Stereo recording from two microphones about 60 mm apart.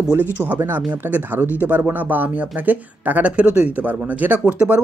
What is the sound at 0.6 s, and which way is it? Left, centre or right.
Speech, right.